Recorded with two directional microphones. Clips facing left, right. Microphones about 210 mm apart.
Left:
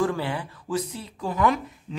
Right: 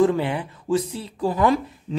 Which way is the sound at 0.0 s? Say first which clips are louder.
Right 6 dB; 20° right (ahead or behind).